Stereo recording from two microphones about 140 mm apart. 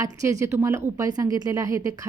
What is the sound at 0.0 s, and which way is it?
A woman's voice, 20° right (ahead or behind).